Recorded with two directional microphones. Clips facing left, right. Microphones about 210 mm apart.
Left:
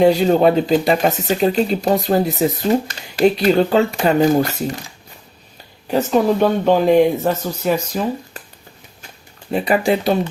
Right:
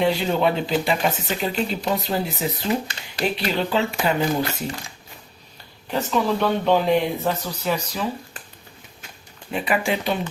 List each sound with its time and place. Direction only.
0.0 s speech: 45° left (ahead or behind)
5.9 s speech: 40° left (ahead or behind)
9.5 s speech: 40° left (ahead or behind)